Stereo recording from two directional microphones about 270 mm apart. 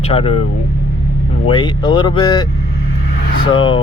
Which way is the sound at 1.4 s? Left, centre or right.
Centre.